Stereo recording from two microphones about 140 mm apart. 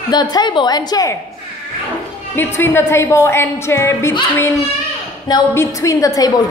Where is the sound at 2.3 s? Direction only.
15° left (ahead or behind).